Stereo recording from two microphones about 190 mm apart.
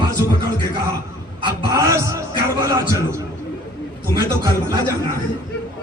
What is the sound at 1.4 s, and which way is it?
Speech, 15° right (ahead or behind).